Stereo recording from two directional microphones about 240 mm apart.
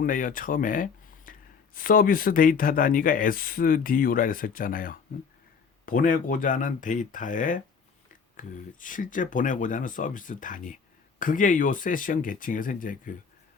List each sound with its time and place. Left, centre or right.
0.0 s speech: left